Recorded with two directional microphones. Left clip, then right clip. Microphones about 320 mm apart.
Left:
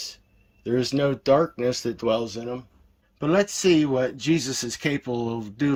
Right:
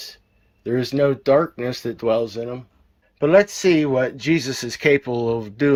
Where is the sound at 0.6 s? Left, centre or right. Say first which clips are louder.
Right 4 dB; centre.